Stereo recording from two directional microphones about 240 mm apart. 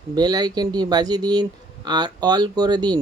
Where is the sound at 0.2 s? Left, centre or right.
Centre.